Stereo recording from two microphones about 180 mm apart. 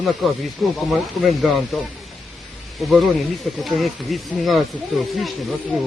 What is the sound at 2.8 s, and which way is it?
Speech, centre (ahead or behind).